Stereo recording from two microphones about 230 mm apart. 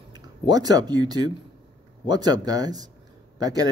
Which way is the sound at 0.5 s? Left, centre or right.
Centre.